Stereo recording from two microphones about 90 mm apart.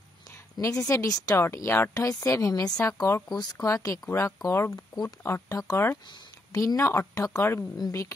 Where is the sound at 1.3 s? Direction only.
35° left (ahead or behind).